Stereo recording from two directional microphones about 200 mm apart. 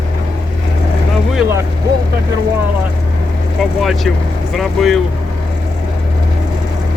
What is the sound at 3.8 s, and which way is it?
Speech, centre (ahead or behind).